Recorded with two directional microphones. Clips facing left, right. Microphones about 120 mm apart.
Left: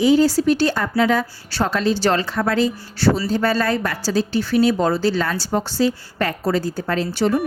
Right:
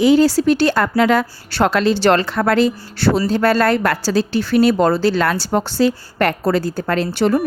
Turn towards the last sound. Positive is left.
turn(degrees=-65)  # may be behind; listen again after turning